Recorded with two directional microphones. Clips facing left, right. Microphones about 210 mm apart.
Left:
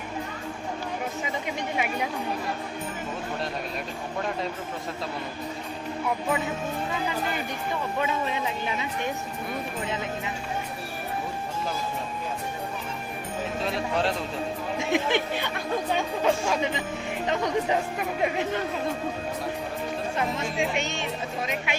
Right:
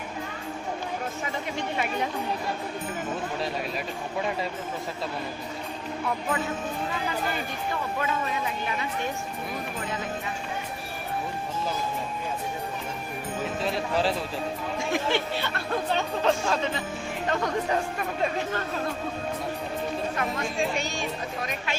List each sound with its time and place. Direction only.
1.5 s speech: 10° left (ahead or behind)
13.4 s speech: centre (ahead or behind)
14.8 s speech: 20° left (ahead or behind)
20.1 s speech: 25° left (ahead or behind)